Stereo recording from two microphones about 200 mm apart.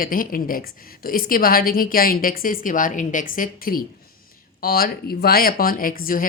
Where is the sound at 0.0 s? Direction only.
45° left (ahead or behind).